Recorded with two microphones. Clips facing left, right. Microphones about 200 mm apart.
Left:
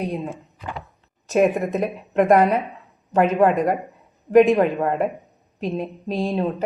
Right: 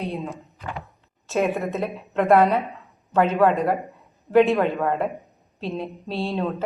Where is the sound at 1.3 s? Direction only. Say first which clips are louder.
Left 5 dB; 15° left (ahead or behind).